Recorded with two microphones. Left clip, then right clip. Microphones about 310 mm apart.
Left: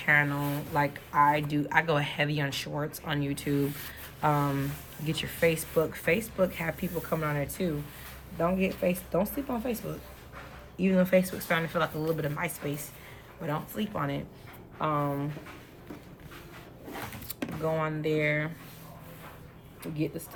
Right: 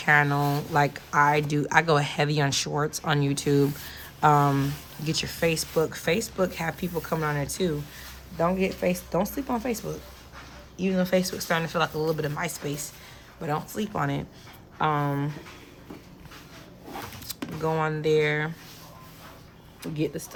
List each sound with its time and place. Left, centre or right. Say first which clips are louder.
0.0 s speech: right 4 dB; centre
10.8 s speech: even; centre; by 15.3 s right
17.6 s speech: right 4 dB; centre
19.8 s speech: right 4 dB; right